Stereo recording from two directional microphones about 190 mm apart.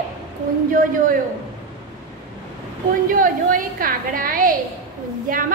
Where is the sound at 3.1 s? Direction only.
45° right (ahead or behind).